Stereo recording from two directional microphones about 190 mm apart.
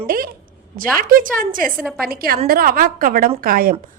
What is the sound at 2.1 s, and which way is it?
A woman's voice, 50° right (ahead or behind).